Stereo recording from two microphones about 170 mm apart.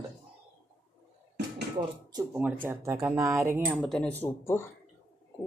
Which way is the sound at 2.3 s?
10° right (ahead or behind).